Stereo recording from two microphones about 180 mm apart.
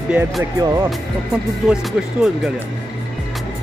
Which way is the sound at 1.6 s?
Centre (ahead or behind).